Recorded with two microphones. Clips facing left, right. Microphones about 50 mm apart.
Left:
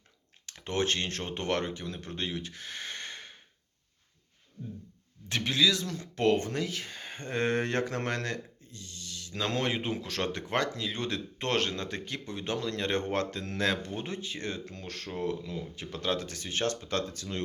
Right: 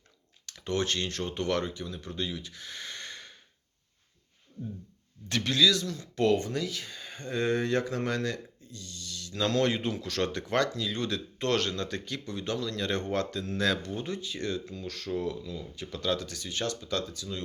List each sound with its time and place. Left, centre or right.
0.4 s speech: left
5.3 s speech: left
5.8 s speech: left
14.6 s speech: left